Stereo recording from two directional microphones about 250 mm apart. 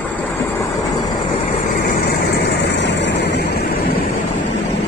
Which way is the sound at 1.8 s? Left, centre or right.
Left.